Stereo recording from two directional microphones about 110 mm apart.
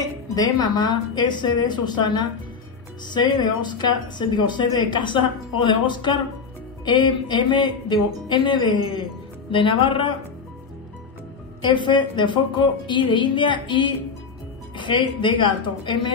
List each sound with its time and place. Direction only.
0.0 s a woman's voice: 35° left (ahead or behind); by 10.1 s 50° left (ahead or behind)
11.6 s a woman's voice: 45° left (ahead or behind)